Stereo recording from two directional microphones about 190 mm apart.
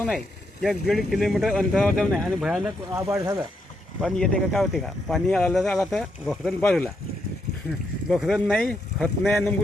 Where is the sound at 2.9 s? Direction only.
15° right (ahead or behind).